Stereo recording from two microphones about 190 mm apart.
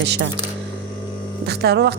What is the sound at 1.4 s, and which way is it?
Speech, 60° right (ahead or behind).